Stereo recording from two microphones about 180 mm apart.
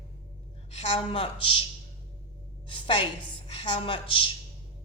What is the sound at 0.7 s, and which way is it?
Speech, 35° left (ahead or behind).